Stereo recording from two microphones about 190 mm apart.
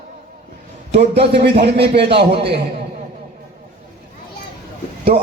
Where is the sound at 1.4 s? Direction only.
60° right (ahead or behind).